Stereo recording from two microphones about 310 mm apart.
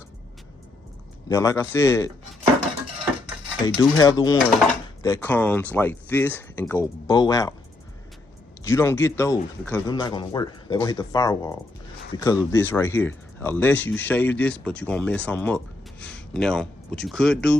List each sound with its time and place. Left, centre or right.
1.3 s speech: centre
3.8 s speech: centre
8.6 s speech: centre